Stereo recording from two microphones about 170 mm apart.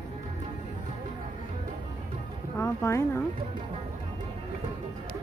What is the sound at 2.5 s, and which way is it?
Speech, 15° left (ahead or behind).